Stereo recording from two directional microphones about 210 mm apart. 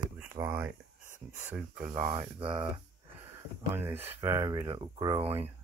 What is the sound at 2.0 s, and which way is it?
Speech, 30° right (ahead or behind).